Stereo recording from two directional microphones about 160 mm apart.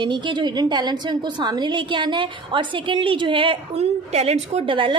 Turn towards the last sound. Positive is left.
turn(degrees=-35)  # may be behind; listen again after turning